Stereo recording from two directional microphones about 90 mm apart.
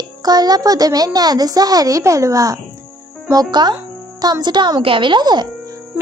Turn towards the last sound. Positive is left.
turn(degrees=-55)  # may be behind; listen again after turning